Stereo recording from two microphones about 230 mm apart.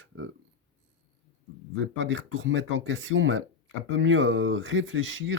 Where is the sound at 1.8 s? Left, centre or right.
Right.